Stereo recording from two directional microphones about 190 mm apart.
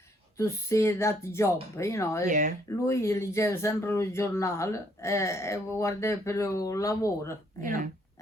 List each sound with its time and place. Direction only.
0.3 s speech: 15° left (ahead or behind)
2.2 s speech: 45° right (ahead or behind)
2.6 s speech: 15° left (ahead or behind)